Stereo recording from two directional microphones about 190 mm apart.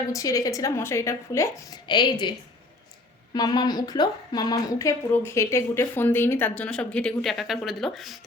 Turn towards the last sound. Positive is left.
turn(degrees=0)  # may be behind; listen again after turning